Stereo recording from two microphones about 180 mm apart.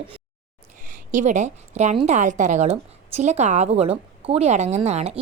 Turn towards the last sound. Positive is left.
turn(degrees=-35)  # may be behind; listen again after turning